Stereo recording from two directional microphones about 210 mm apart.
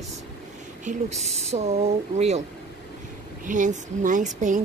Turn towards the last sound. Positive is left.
turn(degrees=-35)  # may be behind; listen again after turning